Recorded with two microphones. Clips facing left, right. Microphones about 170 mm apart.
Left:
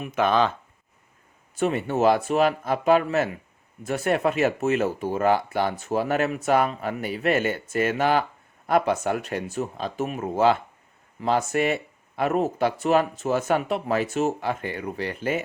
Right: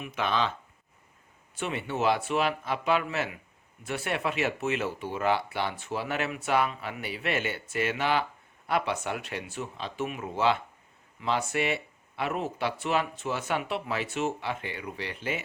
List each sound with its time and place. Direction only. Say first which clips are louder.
0.0 s speech: left 7 dB; 45° left (ahead or behind)
1.5 s speech: left 8 dB; 40° left (ahead or behind)